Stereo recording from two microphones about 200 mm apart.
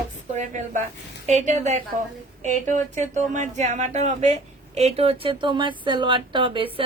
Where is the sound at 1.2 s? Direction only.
35° right (ahead or behind).